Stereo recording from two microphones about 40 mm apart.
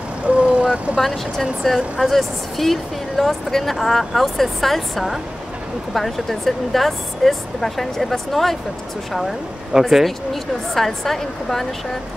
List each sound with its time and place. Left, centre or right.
0.3 s vehicle: right
0.9 s speech: centre
9.7 s speech: centre
10.0 s speech: centre